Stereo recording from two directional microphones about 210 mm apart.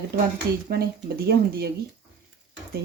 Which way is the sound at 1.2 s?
45° right (ahead or behind).